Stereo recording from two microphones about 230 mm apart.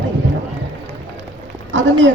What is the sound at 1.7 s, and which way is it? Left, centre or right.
Speech, right.